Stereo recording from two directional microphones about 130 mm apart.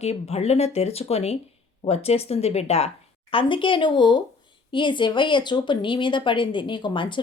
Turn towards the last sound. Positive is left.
turn(degrees=40)  # may be behind; listen again after turning